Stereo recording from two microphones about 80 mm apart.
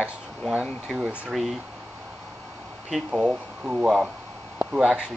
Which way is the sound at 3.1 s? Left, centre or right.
Centre.